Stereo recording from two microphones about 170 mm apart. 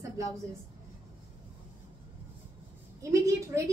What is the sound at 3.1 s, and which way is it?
Speech, 15° right (ahead or behind).